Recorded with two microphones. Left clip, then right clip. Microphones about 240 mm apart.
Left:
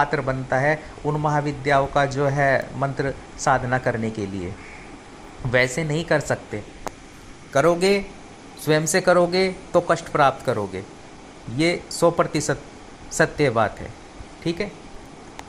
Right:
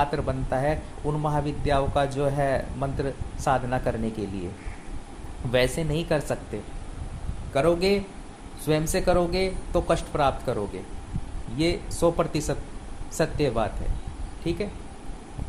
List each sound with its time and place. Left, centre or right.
0.0 s a man's voice: centre
5.5 s a man's voice: centre
7.5 s a man's voice: centre